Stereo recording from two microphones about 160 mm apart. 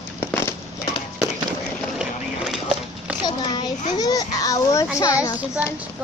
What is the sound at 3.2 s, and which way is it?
A child's voice, 25° left (ahead or behind).